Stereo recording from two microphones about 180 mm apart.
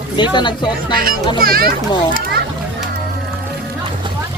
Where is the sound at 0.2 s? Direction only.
25° left (ahead or behind).